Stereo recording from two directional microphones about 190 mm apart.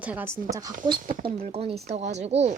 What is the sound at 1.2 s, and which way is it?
Speech, 30° right (ahead or behind).